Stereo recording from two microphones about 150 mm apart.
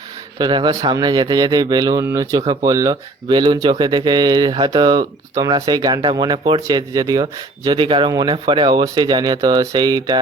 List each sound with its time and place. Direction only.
0.3 s speech: 30° right (ahead or behind)